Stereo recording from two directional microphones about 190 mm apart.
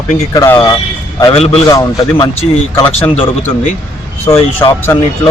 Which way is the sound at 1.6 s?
20° left (ahead or behind).